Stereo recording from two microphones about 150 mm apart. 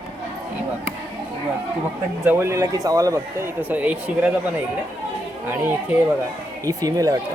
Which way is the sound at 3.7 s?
10° right (ahead or behind).